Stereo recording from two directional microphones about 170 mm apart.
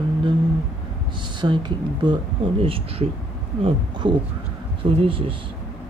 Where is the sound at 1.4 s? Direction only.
25° right (ahead or behind).